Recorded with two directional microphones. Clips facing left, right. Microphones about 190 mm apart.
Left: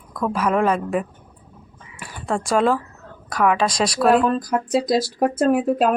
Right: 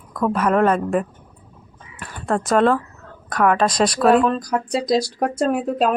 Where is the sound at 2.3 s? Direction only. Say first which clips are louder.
Right 2 dB; centre (ahead or behind).